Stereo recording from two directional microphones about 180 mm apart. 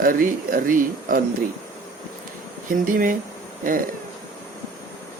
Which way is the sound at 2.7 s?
50° right (ahead or behind).